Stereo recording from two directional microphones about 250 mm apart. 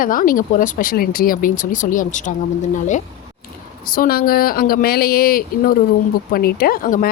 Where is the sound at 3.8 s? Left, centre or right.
Left.